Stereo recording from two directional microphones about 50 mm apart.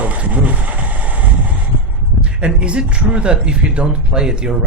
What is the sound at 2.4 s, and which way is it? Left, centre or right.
Speech, right.